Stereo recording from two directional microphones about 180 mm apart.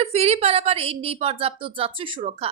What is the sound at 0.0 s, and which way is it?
Speech, 35° right (ahead or behind).